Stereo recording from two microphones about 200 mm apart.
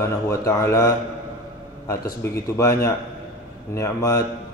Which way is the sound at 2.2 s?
15° left (ahead or behind).